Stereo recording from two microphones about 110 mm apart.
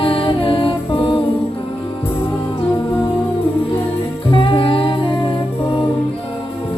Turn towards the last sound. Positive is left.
turn(degrees=50)  # may be behind; listen again after turning